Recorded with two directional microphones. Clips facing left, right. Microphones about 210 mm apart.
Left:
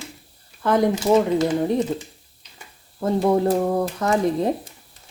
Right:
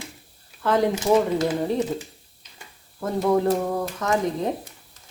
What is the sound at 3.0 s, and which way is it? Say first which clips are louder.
Speech: left 2 dB; 30° left (ahead or behind).